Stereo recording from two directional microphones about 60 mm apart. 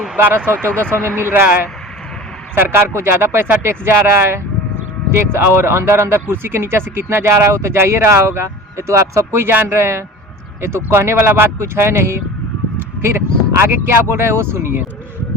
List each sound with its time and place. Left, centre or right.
0.2 s speech: right
2.6 s speech: right